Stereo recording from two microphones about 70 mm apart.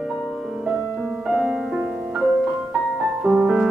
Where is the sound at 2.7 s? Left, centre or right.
Centre.